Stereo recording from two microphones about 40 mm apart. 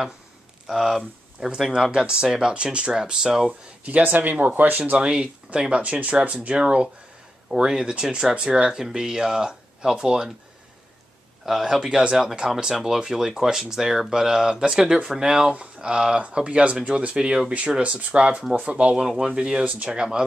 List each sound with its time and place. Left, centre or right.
0.7 s speech: centre
1.7 s speech: right
2.9 s speech: centre
3.8 s speech: right
4.9 s speech: right
7.5 s speech: centre
11.4 s speech: centre
15.5 s speech: right
17.1 s speech: centre
18.9 s speech: centre